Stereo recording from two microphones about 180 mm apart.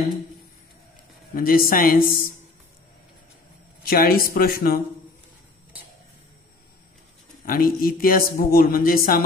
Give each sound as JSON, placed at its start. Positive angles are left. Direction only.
{"t": 1.3, "sound": "speech", "side_deg": 50}
{"t": 3.8, "sound": "speech", "side_deg": 55}
{"t": 7.4, "sound": "speech", "side_deg": 50}